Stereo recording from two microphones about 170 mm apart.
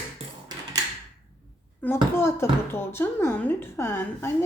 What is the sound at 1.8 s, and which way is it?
Speech, 15° left (ahead or behind).